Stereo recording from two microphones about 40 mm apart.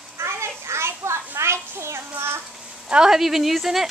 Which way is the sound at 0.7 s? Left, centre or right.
Right.